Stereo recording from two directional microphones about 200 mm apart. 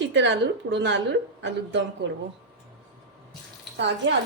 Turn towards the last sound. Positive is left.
turn(degrees=-60)  # may be behind; listen again after turning